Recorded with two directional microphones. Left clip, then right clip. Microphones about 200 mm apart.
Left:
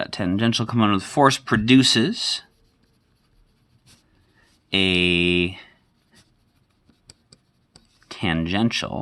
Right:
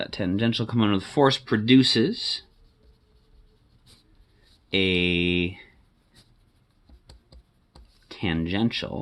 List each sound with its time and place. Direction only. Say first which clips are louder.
0.0 s speech: left 3 dB; 40° left (ahead or behind)
4.7 s speech: left 4 dB; 35° left (ahead or behind)
8.0 s speech: left 4 dB; 35° left (ahead or behind)